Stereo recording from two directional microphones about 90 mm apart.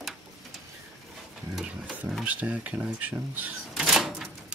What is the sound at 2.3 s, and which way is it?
Speech, 15° right (ahead or behind).